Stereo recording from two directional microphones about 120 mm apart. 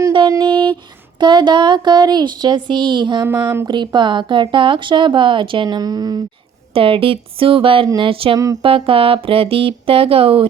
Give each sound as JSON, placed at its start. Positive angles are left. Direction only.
{"t": 0.4, "sound": "a sound", "side_deg": -40}
{"t": 1.2, "sound": "speech", "side_deg": -40}
{"t": 3.2, "sound": "speech", "side_deg": -20}
{"t": 3.7, "sound": "speech", "side_deg": -40}
{"t": 6.7, "sound": "speech", "side_deg": -50}